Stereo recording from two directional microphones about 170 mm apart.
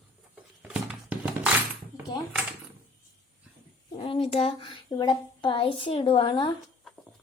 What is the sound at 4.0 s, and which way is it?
A woman's voice, 35° left (ahead or behind).